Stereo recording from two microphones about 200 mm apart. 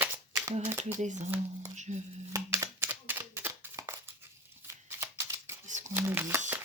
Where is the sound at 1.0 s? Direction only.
35° right (ahead or behind).